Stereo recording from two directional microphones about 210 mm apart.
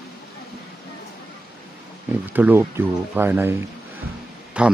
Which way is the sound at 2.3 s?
10° right (ahead or behind).